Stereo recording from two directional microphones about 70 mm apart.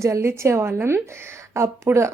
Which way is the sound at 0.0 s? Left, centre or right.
Right.